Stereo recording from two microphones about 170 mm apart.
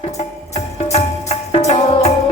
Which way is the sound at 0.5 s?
40° left (ahead or behind).